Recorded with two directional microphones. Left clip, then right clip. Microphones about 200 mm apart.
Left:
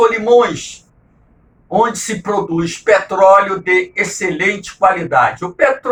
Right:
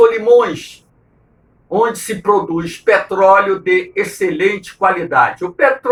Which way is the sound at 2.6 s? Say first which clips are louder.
Left 1 dB; 10° right (ahead or behind).